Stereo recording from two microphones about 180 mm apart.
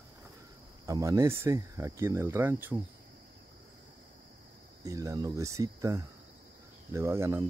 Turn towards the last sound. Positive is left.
turn(degrees=-15)  # may be behind; listen again after turning